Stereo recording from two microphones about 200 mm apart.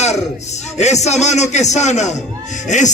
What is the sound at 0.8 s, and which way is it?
A man's voice, 35° left (ahead or behind).